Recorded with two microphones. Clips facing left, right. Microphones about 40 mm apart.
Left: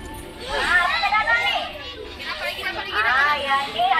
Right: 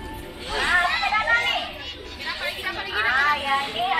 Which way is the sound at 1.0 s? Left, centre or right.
Centre.